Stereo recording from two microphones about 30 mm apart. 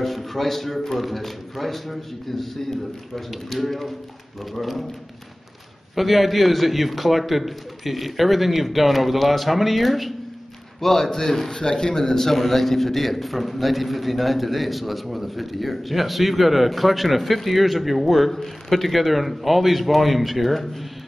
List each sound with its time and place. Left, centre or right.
0.0 s a man's voice: centre
5.9 s a man's voice: centre
10.8 s a man's voice: centre